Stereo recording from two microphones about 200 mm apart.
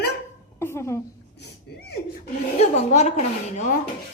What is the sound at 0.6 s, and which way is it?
Speech, 15° left (ahead or behind).